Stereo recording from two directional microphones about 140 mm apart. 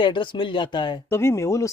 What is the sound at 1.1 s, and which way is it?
Speech, 20° left (ahead or behind).